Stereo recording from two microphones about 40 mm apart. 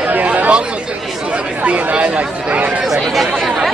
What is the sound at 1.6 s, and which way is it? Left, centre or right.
Chatter, right.